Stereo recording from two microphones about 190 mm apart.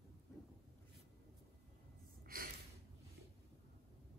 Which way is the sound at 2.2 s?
50° right (ahead or behind).